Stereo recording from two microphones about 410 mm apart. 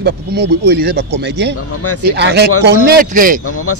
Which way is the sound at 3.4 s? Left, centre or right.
Left.